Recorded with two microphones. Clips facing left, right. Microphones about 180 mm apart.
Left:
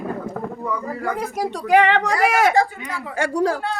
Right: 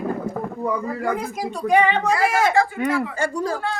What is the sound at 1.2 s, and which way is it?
Speech, 75° left (ahead or behind).